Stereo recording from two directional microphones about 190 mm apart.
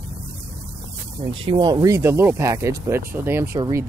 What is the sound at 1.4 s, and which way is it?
Speech, 25° right (ahead or behind).